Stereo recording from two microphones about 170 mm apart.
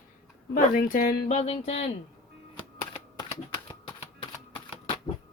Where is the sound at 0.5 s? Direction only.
55° left (ahead or behind).